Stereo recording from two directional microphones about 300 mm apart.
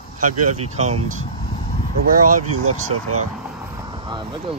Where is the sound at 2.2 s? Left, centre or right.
Right.